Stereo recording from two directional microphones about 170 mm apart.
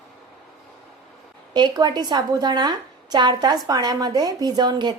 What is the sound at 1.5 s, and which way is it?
A woman's voice, 25° right (ahead or behind).